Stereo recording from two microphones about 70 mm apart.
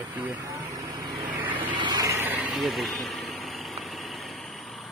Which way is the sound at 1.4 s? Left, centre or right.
Right.